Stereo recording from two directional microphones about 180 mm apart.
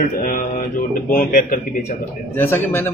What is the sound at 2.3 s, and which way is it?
Mantra, 10° left (ahead or behind).